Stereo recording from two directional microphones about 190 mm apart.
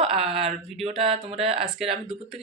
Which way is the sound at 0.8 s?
30° right (ahead or behind).